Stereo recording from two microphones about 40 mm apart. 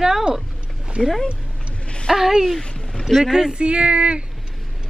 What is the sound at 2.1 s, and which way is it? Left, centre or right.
Speech, centre.